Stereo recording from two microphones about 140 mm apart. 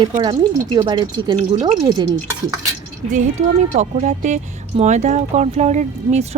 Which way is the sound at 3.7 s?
55° right (ahead or behind).